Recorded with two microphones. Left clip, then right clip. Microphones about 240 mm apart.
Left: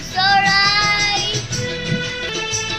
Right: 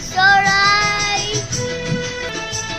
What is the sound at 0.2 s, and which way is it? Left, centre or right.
Child singing, centre.